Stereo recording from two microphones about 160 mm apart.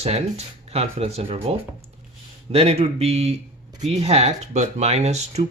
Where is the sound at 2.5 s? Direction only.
40° right (ahead or behind).